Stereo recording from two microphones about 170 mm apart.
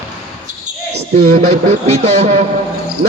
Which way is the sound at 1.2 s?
35° right (ahead or behind).